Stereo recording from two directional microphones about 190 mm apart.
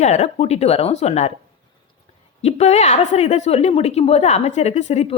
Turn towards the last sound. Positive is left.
turn(degrees=35)  # may be behind; listen again after turning